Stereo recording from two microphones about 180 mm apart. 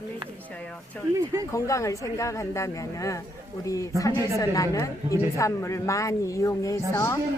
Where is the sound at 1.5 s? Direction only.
15° left (ahead or behind).